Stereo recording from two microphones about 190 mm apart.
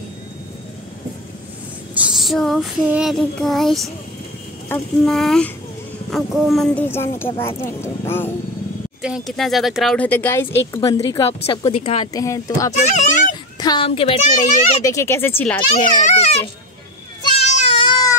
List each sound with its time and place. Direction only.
2.0 s child singing: 5° right (ahead or behind)
6.0 s speech: centre (ahead or behind)
9.0 s child singing: centre (ahead or behind)
10.8 s a woman's voice: 25° left (ahead or behind)
12.7 s speech: 40° left (ahead or behind)
13.6 s a woman's voice: 25° left (ahead or behind)
16.1 s a child's voice: 35° left (ahead or behind)
17.2 s baby cry: 35° left (ahead or behind)